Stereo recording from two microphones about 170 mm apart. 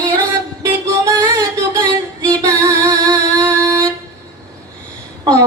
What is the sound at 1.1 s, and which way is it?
Music, 20° right (ahead or behind).